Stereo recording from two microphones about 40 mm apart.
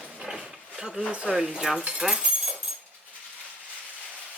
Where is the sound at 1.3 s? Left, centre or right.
Right.